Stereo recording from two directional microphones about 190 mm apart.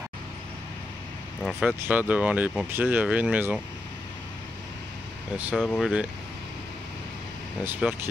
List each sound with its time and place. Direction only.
1.4 s speech: 5° right (ahead or behind)
5.5 s speech: centre (ahead or behind)
7.6 s speech: 10° right (ahead or behind)